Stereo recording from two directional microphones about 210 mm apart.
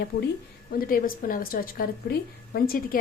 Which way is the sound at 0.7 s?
45° left (ahead or behind).